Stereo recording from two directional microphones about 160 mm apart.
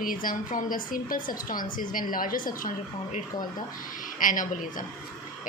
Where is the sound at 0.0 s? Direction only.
60° left (ahead or behind).